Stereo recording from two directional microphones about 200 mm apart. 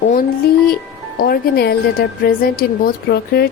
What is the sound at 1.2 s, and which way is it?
Speech, 50° left (ahead or behind).